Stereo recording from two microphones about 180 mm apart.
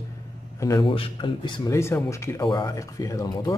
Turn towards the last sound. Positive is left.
turn(degrees=20)  # may be behind; listen again after turning